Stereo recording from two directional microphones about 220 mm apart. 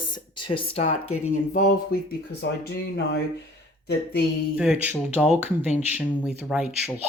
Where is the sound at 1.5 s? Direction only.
35° left (ahead or behind).